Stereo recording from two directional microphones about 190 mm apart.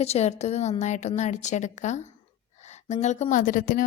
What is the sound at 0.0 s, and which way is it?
A woman's voice, 35° left (ahead or behind).